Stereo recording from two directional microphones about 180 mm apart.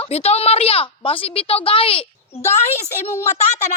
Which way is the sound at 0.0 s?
35° left (ahead or behind).